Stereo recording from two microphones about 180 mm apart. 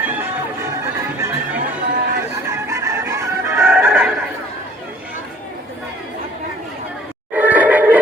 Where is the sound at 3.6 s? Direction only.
5° right (ahead or behind).